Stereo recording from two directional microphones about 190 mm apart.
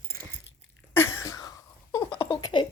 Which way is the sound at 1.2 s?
20° left (ahead or behind).